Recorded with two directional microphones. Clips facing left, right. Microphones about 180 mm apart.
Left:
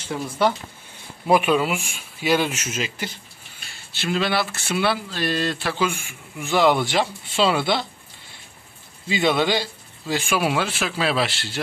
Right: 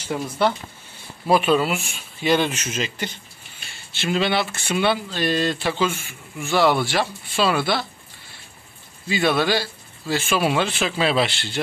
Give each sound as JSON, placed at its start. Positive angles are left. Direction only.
{"t": 1.2, "sound": "a man's voice", "side_deg": 15}
{"t": 5.9, "sound": "speech", "side_deg": 15}
{"t": 9.1, "sound": "a man's voice", "side_deg": 20}